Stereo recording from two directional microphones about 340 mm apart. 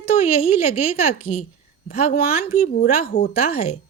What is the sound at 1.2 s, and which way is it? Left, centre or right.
A child's voice, centre.